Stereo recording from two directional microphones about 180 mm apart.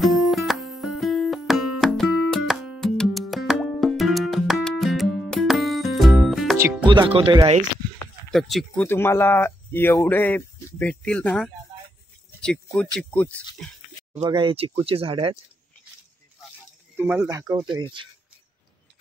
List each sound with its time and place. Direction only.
0.0 s music: centre (ahead or behind)
6.8 s speech: 25° right (ahead or behind)
8.3 s speech: centre (ahead or behind)
8.8 s speech: 15° left (ahead or behind)
14.3 s speech: 30° right (ahead or behind)
16.9 s speech: 10° right (ahead or behind); by 18.0 s 25° right (ahead or behind)